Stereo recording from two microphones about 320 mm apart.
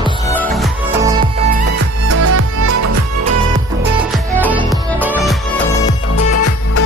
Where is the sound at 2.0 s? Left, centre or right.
Right.